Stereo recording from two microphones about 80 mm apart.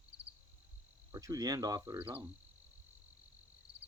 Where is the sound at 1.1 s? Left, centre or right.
Right.